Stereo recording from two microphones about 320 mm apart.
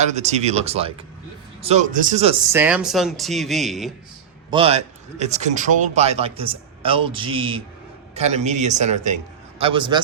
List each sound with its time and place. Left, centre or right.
0.0 s a man's voice: right
2.5 s speech: centre
4.5 s a man's voice: centre